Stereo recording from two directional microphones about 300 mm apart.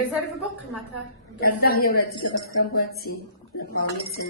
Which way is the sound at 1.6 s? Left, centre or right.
Left.